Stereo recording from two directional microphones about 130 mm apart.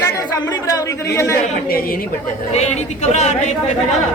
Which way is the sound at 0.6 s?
25° left (ahead or behind).